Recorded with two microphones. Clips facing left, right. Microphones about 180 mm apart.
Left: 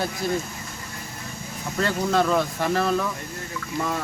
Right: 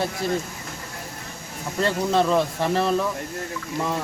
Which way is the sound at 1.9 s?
Centre (ahead or behind).